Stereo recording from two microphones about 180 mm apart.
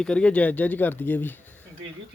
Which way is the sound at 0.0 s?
5° left (ahead or behind).